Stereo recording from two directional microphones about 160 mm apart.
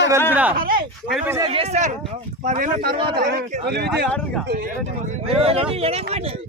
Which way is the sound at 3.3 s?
90° right.